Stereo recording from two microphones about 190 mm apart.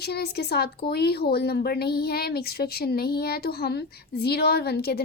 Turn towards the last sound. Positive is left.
turn(degrees=55)  # may be behind; listen again after turning